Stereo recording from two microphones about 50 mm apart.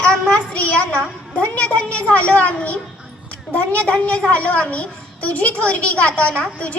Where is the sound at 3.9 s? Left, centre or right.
Left.